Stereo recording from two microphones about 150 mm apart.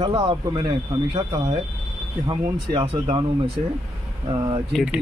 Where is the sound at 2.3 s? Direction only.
35° right (ahead or behind).